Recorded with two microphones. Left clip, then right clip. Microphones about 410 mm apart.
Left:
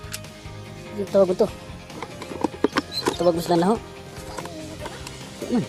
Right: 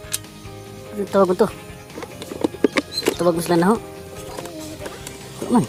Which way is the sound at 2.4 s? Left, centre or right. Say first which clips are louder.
Right 4 dB; left.